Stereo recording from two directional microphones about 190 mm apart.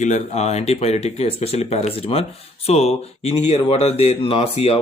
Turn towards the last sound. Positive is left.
turn(degrees=30)  # may be behind; listen again after turning